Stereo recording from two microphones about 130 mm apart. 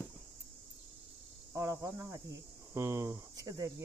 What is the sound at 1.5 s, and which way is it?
Speech, 25° right (ahead or behind).